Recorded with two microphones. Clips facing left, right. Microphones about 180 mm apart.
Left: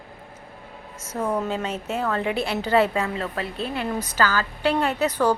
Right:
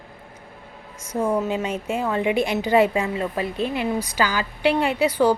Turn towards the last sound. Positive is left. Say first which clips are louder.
# right 3 dB
turn(degrees=-10)  # may be behind; listen again after turning